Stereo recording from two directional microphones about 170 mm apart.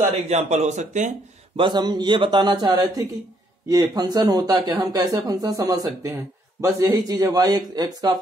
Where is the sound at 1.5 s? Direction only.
25° right (ahead or behind).